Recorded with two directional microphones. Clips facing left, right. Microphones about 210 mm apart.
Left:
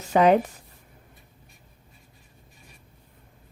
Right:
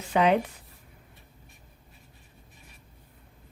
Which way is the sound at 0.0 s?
40° left (ahead or behind).